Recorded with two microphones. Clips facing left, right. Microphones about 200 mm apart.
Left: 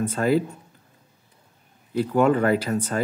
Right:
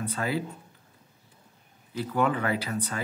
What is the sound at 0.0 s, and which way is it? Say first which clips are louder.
Speech: left 9 dB; 45° left (ahead or behind).